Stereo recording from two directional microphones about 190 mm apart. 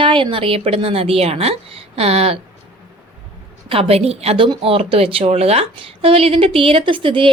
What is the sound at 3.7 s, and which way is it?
A woman's voice, 30° right (ahead or behind).